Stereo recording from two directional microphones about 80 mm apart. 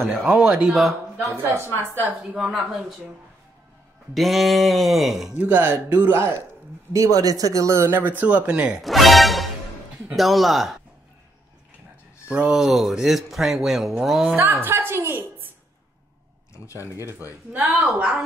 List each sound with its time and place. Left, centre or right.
0.1 s speech: centre
0.7 s speech: centre
1.3 s speech: right
2.3 s speech: centre
4.1 s speech: centre
5.4 s speech: right
6.9 s speech: right
8.2 s speech: centre
8.8 s speech: centre
12.3 s speech: centre
14.6 s a sound: right
16.5 s a sound: left
17.9 s speech: centre